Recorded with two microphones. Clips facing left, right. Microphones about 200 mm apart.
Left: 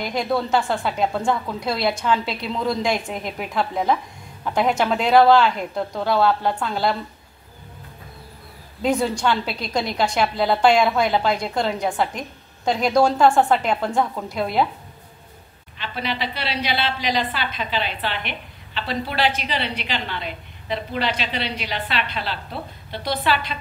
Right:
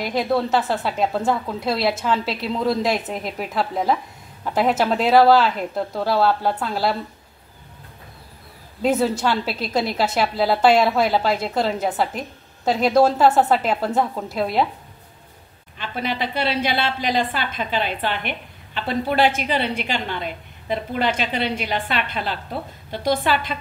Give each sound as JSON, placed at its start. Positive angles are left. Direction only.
{"t": 0.0, "sound": "a woman's voice", "side_deg": 0}
{"t": 8.8, "sound": "a woman's voice", "side_deg": -5}
{"t": 15.8, "sound": "a woman's voice", "side_deg": -45}